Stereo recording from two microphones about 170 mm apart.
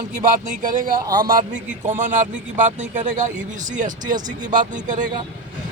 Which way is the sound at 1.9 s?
50° right (ahead or behind).